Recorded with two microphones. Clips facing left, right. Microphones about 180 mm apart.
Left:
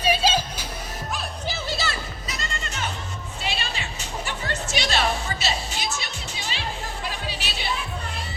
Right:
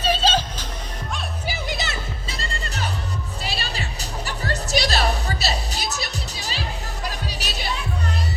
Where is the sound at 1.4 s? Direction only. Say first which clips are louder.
Even; 15° right (ahead or behind).